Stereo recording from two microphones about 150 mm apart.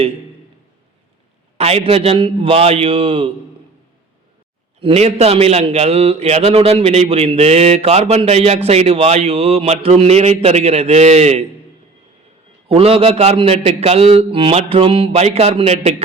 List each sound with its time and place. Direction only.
1.5 s a man's voice: 40° right (ahead or behind)
4.8 s a man's voice: 40° right (ahead or behind)
12.6 s a man's voice: 40° right (ahead or behind)